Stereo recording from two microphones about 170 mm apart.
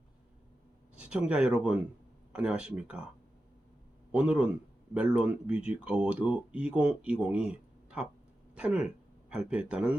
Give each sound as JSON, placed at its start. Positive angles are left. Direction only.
{"t": 0.9, "sound": "speech", "side_deg": -5}
{"t": 4.1, "sound": "speech", "side_deg": -10}